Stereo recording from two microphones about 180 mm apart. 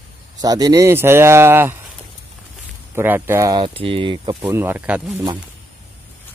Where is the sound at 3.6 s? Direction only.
30° right (ahead or behind).